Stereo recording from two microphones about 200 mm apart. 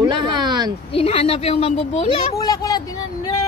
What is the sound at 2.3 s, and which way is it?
Speech, 15° left (ahead or behind).